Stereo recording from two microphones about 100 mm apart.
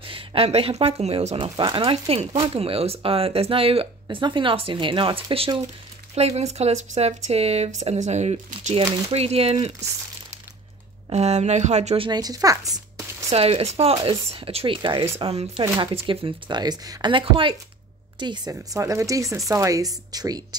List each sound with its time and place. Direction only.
0.0 s speech: 65° right (ahead or behind)
6.1 s speech: 90° right
11.1 s speech: 90° right
12.1 s speech: 40° right (ahead or behind)
13.3 s speech: 80° right; by 14.8 s 65° right (ahead or behind)
14.8 s a woman's voice: 50° right (ahead or behind)
15.1 s speech: 80° right
15.9 s speech: 60° right (ahead or behind)
18.2 s a woman's voice: 50° right (ahead or behind)
18.5 s speech: 30° right (ahead or behind)